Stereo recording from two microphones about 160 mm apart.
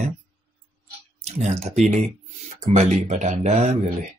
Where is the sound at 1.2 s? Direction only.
45° right (ahead or behind).